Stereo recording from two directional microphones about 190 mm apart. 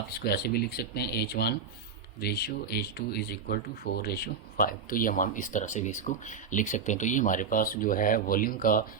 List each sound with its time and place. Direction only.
0.2 s speech: 55° left (ahead or behind)